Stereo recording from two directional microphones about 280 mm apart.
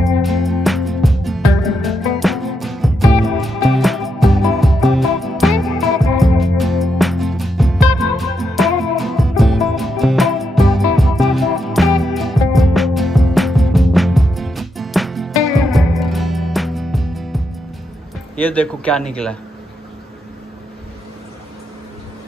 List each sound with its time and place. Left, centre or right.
0.0 s music: centre
18.3 s a man's voice: centre